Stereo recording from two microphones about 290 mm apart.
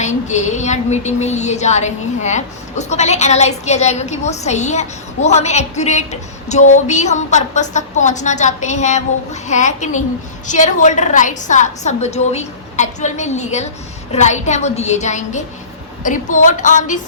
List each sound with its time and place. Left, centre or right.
0.0 s a woman's voice: left